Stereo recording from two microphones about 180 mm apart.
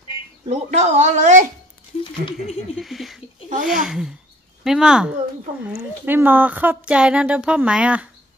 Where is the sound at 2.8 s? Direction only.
Centre (ahead or behind).